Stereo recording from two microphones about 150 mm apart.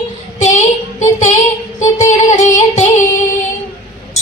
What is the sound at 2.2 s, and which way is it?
Music, 50° left (ahead or behind).